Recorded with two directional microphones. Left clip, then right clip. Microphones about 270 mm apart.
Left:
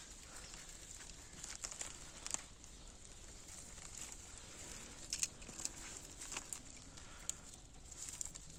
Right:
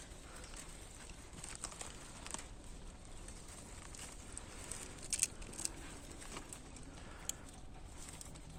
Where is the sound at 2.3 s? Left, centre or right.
Centre.